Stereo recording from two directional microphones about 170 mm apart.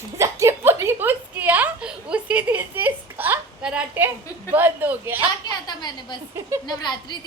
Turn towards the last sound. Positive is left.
turn(degrees=25)  # may be behind; listen again after turning